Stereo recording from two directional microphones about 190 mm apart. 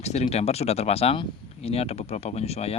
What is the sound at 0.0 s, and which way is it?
Speech, 35° left (ahead or behind).